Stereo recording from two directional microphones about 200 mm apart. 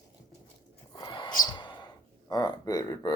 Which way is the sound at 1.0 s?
20° left (ahead or behind).